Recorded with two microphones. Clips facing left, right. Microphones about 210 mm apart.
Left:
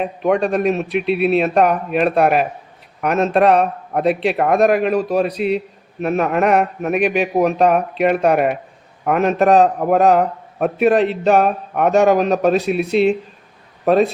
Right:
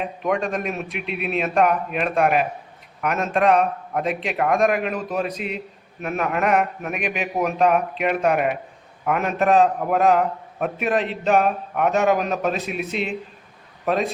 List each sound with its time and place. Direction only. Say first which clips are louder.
0.2 s a man's voice: left 7 dB; 40° left (ahead or behind)